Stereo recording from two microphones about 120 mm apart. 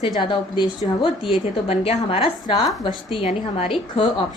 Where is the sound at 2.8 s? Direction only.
40° left (ahead or behind).